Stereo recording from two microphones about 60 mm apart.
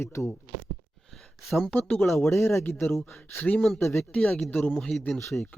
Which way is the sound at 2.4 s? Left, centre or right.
Left.